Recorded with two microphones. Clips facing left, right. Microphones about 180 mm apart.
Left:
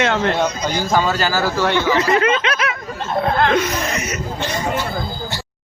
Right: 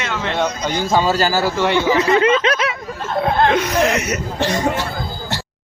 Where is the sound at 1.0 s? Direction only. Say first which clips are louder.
Right 2 dB; 35° right (ahead or behind).